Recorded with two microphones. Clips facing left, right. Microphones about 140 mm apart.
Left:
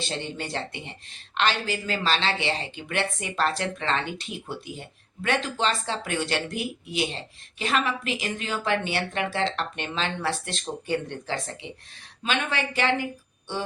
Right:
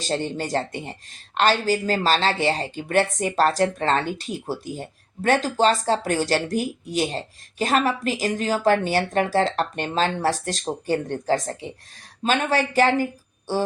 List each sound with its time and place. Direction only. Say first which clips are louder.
0.0 s speech: right 6 dB; 40° right (ahead or behind)